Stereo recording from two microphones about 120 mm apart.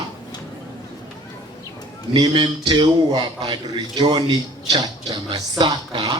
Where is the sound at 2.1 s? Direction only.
40° right (ahead or behind).